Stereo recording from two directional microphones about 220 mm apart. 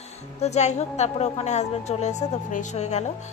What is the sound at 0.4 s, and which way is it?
A woman's voice, 30° left (ahead or behind).